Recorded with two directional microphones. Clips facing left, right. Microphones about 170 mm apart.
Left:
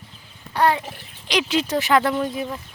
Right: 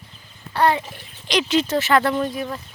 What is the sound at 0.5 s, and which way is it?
Speech, 15° left (ahead or behind).